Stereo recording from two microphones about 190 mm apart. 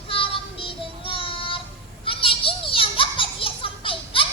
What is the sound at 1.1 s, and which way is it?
Child singing, 25° left (ahead or behind).